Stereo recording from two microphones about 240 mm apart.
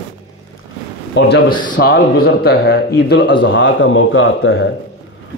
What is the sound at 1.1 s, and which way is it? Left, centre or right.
A man's voice, left.